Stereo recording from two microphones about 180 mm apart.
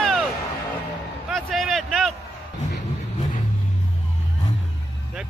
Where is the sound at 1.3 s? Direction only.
Centre (ahead or behind).